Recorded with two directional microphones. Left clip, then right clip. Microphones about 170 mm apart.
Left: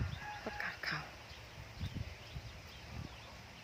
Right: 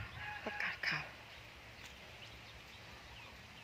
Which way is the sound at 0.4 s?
15° right (ahead or behind).